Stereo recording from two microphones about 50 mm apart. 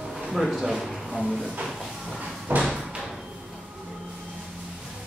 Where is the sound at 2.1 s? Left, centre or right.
Right.